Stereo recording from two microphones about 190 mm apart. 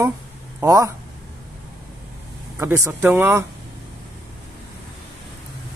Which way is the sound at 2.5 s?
15° right (ahead or behind).